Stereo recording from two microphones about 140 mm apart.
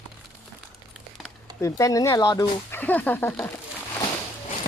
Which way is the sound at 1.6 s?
20° left (ahead or behind).